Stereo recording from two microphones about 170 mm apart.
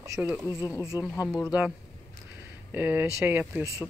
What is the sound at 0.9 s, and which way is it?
Speech, 20° left (ahead or behind).